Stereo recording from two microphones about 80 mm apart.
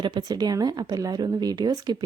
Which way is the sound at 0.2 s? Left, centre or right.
Right.